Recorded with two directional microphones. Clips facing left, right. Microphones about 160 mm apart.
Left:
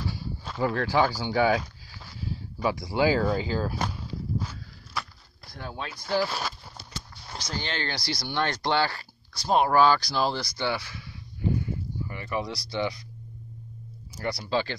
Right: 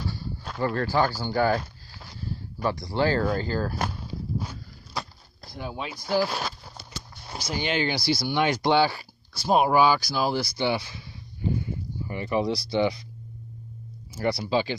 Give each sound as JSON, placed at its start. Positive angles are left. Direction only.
{"t": 0.1, "sound": "a sound", "side_deg": 5}
{"t": 0.7, "sound": "speech", "side_deg": -5}
{"t": 4.4, "sound": "walk", "side_deg": -20}
{"t": 5.6, "sound": "speech", "side_deg": -10}
{"t": 6.3, "sound": "a sound", "side_deg": 0}
{"t": 7.2, "sound": "speech", "side_deg": -10}
{"t": 10.7, "sound": "speech", "side_deg": -20}
{"t": 14.1, "sound": "speech", "side_deg": -25}
{"t": 14.5, "sound": "speech", "side_deg": -10}